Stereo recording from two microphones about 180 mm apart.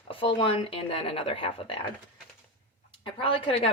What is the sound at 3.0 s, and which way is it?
Speech, 30° left (ahead or behind).